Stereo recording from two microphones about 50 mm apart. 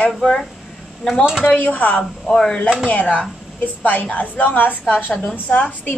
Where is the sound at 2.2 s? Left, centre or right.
Centre.